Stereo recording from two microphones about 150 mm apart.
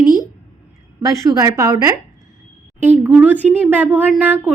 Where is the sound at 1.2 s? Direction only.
20° right (ahead or behind).